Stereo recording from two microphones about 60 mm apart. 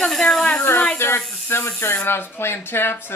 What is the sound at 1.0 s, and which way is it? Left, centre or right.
Speech, left.